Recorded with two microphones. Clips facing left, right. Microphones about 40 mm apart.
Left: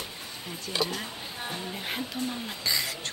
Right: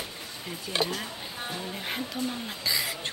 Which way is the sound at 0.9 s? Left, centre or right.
Centre.